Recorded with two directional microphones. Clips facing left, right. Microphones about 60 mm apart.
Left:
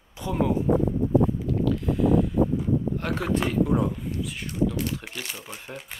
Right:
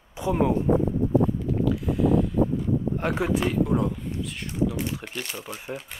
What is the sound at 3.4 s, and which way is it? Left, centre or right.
Speech, centre.